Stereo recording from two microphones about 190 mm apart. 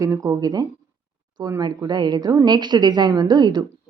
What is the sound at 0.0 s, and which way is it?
Speech, 15° right (ahead or behind).